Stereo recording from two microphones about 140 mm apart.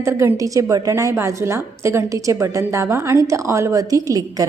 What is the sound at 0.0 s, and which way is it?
A woman's voice, 20° right (ahead or behind).